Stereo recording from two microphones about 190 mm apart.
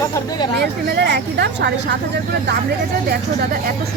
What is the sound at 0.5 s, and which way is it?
Speech, 55° right (ahead or behind).